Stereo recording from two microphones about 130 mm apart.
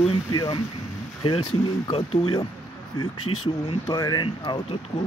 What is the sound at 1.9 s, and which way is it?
Speech, 45° left (ahead or behind).